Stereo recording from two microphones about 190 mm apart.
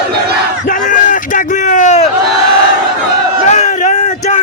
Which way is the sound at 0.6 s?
45° left (ahead or behind).